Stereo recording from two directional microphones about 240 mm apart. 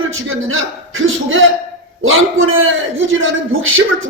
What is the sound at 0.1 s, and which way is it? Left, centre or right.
A man's voice, right.